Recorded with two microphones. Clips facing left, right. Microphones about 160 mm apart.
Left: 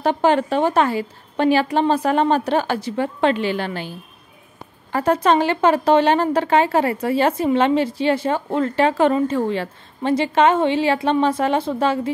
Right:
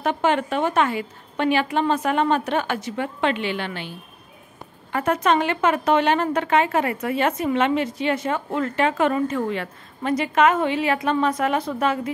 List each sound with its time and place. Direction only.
0.0 s a woman's voice: 35° left (ahead or behind)
4.9 s a woman's voice: 30° left (ahead or behind)